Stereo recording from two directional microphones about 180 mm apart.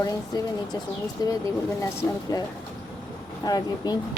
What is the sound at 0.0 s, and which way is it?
A woman's voice, 20° left (ahead or behind).